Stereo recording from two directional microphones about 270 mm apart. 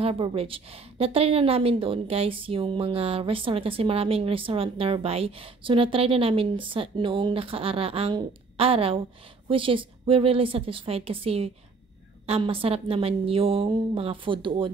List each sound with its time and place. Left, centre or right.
0.0 s a woman's voice: centre